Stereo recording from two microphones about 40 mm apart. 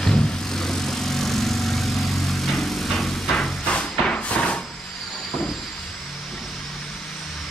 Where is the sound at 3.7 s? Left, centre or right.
Left.